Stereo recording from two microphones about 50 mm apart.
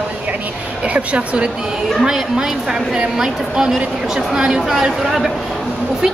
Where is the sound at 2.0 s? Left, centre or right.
Centre.